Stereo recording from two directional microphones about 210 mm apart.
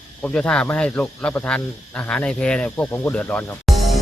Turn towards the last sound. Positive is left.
turn(degrees=5)  # may be behind; listen again after turning